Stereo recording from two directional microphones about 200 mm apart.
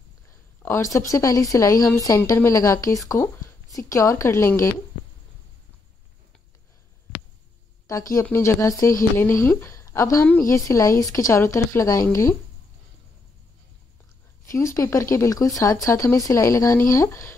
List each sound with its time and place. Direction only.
0.6 s speech: 15° left (ahead or behind)
8.1 s a woman's voice: 15° left (ahead or behind)
14.4 s speech: 15° left (ahead or behind)